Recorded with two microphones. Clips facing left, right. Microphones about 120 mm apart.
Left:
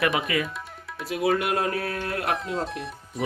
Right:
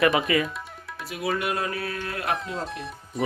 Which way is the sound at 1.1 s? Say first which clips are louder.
Left 7 dB; 90° left.